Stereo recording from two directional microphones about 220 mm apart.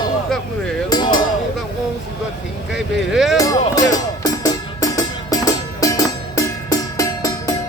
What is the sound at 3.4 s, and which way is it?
Music, 15° left (ahead or behind).